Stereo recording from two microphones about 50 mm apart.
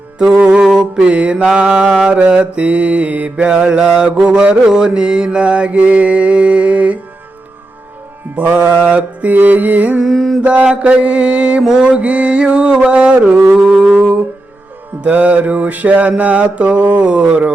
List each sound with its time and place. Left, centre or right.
0.4 s mantra: centre
4.3 s mantra: right
4.6 s mantra: centre; by 7.0 s right
8.4 s mantra: right
10.0 s mantra: centre
10.4 s mantra: right
15.0 s mantra: right